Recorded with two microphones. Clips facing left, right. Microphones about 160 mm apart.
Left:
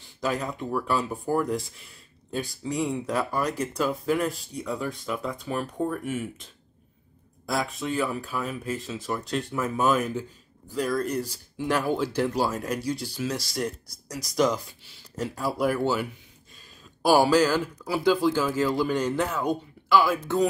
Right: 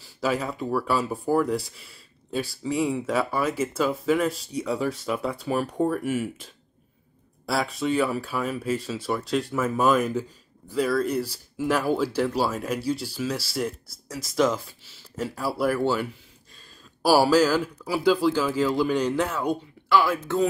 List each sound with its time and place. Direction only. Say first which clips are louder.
0.0 s speech: right 2 dB; 5° right (ahead or behind)
5.4 s speech: right 4 dB; 10° right (ahead or behind)
7.4 s speech: right 3 dB; 5° right (ahead or behind)
18.8 s speech: right 2 dB; 5° left (ahead or behind)